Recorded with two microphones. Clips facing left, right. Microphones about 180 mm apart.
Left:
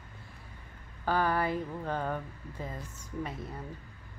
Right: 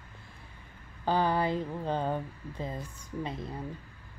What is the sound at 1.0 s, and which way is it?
Speech, 25° right (ahead or behind).